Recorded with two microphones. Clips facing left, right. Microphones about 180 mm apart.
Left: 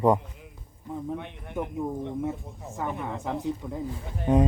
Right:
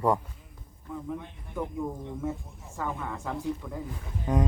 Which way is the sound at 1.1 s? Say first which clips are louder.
Left 3 dB; 70° left (ahead or behind).